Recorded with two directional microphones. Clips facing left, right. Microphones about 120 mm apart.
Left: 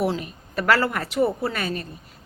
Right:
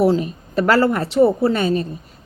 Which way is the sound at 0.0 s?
30° right (ahead or behind).